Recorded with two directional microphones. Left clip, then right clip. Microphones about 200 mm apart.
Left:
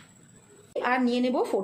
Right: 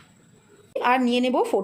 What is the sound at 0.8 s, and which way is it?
Speech, 30° right (ahead or behind).